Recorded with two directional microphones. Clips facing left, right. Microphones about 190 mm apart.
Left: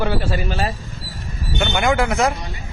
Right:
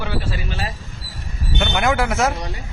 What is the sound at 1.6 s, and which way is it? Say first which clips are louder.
Speech: left 1 dB; centre (ahead or behind).